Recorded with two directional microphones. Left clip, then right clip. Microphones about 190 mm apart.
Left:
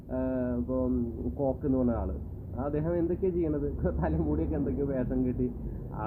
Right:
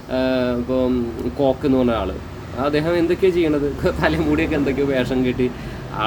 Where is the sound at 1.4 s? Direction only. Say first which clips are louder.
Right 12 dB; 30° right (ahead or behind).